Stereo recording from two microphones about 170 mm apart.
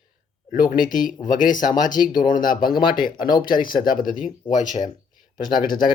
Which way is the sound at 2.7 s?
30° left (ahead or behind).